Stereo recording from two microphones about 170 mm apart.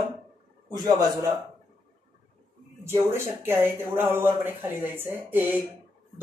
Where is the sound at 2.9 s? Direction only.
15° right (ahead or behind).